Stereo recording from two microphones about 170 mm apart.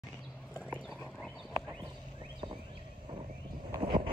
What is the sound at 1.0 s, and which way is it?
Horse, 5° left (ahead or behind).